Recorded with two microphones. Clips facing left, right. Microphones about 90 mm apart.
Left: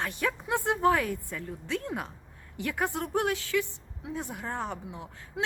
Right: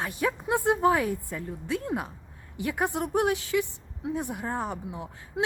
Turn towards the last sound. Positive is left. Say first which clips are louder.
# right 4 dB
turn(degrees=-15)  # may be behind; listen again after turning